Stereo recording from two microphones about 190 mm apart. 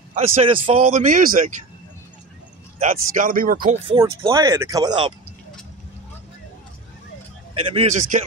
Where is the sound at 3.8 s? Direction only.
25° right (ahead or behind).